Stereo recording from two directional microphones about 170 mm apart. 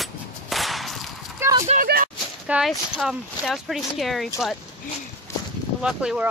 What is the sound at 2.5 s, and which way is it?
Speech, centre (ahead or behind).